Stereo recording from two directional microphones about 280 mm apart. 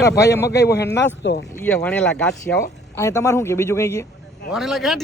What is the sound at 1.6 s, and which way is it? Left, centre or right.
A man's voice, centre.